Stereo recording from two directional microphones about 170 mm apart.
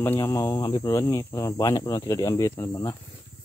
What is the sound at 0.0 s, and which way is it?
Speech, 15° left (ahead or behind).